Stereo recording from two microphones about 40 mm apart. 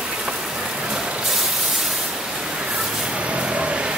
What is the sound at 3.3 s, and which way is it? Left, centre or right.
Vehicle, right.